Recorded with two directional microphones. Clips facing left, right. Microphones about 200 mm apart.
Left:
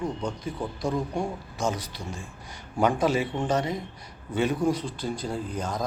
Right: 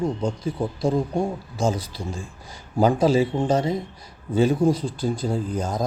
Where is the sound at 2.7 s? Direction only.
30° right (ahead or behind).